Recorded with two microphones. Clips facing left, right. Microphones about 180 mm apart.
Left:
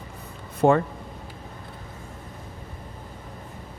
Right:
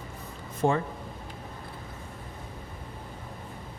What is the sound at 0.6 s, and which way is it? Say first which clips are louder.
Speech: left 7 dB; 55° left (ahead or behind).